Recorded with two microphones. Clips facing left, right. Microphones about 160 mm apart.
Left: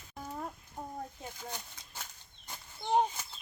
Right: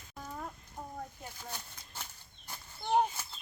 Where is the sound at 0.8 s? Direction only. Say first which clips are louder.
Left 2 dB; 25° left (ahead or behind).